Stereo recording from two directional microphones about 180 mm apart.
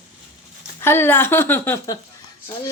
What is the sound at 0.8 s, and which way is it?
A woman's voice, 15° left (ahead or behind).